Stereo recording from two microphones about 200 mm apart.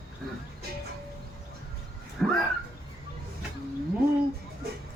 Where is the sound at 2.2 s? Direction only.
5° left (ahead or behind).